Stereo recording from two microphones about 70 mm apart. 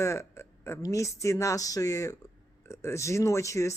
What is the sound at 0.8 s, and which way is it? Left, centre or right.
Speech, left.